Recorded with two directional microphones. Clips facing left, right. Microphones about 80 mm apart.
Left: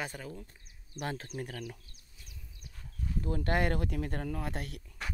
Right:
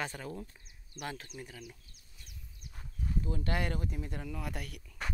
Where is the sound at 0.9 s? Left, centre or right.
Left.